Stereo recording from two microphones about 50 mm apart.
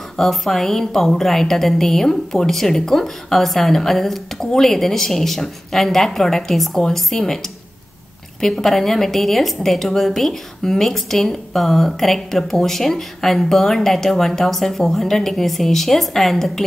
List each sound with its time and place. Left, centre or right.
0.2 s a woman's voice: centre
8.4 s a woman's voice: centre